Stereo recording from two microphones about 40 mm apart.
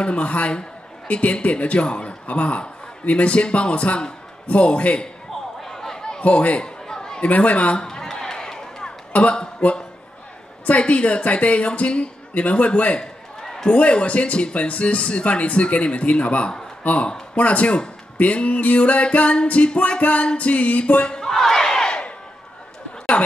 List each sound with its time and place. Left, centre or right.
0.0 s a man's voice: left
5.7 s a sound: centre
6.2 s a man's voice: left
6.9 s chatter: centre
7.2 s a woman's voice: left
7.8 s a sound: centre
9.1 s a woman's voice: left
13.0 s a sound: centre
13.7 s a woman's voice: left
21.3 s battle cry: centre